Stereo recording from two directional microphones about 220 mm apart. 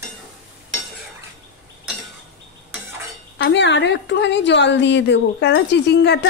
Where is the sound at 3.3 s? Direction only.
55° left (ahead or behind).